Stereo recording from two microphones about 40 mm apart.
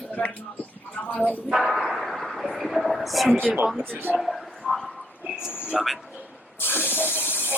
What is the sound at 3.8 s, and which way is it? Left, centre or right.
Speech, right.